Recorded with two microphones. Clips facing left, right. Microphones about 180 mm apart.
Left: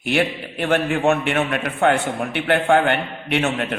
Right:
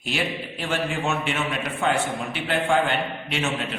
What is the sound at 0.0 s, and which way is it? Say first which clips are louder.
A man's voice: left 7 dB; 60° left (ahead or behind).